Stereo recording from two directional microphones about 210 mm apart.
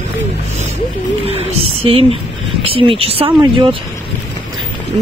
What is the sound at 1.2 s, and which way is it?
Speech, 25° right (ahead or behind).